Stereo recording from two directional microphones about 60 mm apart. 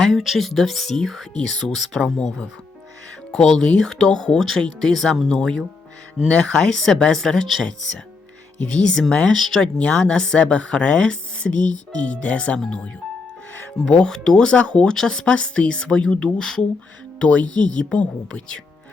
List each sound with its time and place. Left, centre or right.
0.0 s speech: centre
3.3 s a woman's voice: centre
8.8 s a woman's voice: centre
13.9 s a woman's voice: centre